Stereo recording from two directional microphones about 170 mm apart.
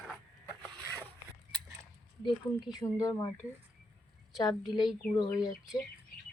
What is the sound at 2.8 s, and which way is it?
Speech, 20° left (ahead or behind).